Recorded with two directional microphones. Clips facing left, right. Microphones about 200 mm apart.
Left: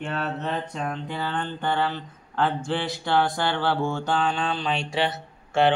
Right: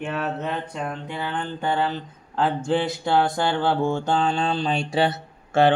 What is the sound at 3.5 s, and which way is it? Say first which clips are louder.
Mantra: right 3 dB; 15° right (ahead or behind).